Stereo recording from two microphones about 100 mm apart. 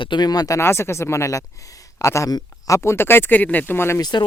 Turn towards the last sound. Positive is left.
turn(degrees=25)  # may be behind; listen again after turning